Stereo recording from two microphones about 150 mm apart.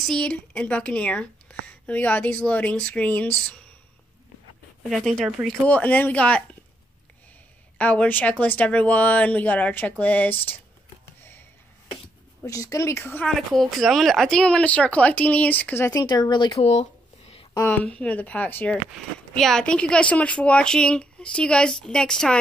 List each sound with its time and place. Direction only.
0.0 s speech: 5° left (ahead or behind)
4.8 s speech: centre (ahead or behind)
7.7 s speech: 10° left (ahead or behind)
12.4 s a woman's voice: 20° left (ahead or behind)
13.3 s speech: centre (ahead or behind); by 16.6 s 30° left (ahead or behind)
17.8 s speech: 10° left (ahead or behind)